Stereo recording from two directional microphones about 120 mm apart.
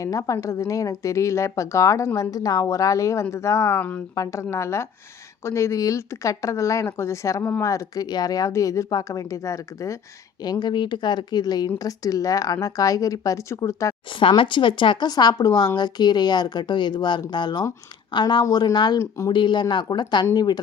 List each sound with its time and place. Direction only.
0.0 s speech: 30° left (ahead or behind)
4.1 s speech: 25° left (ahead or behind)
10.4 s speech: 35° left (ahead or behind)
14.1 s speech: 45° left (ahead or behind); by 19.3 s 25° left (ahead or behind)
19.3 s speech: 40° left (ahead or behind)